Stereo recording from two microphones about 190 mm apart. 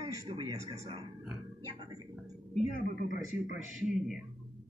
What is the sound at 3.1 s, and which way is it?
Speech, 40° left (ahead or behind).